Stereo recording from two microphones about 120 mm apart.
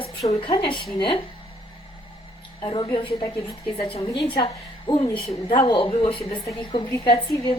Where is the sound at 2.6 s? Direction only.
35° left (ahead or behind).